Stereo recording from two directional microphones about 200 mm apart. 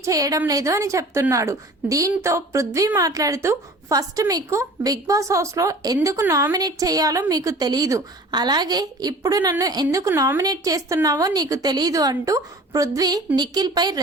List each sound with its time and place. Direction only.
0.0 s a woman's voice: 15° right (ahead or behind)